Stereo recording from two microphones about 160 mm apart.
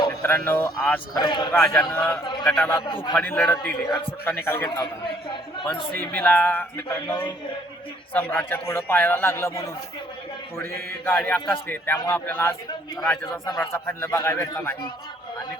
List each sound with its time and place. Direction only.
0.3 s a man's voice: 10° left (ahead or behind)
1.1 s a man's voice: 25° left (ahead or behind)
1.5 s a man's voice: 5° left (ahead or behind)
2.8 s a man's voice: 30° left (ahead or behind)
3.2 s a man's voice: 10° left (ahead or behind)
5.9 s a man's voice: 10° left (ahead or behind)
8.1 s a man's voice: 10° left (ahead or behind)
11.0 s a man's voice: 10° left (ahead or behind)